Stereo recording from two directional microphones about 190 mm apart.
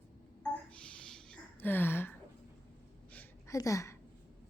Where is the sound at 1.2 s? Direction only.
5° left (ahead or behind).